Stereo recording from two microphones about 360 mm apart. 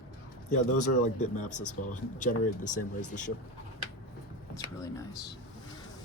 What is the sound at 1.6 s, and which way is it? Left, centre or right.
A man's voice, left.